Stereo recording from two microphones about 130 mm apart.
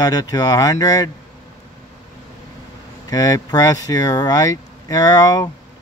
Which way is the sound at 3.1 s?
25° left (ahead or behind).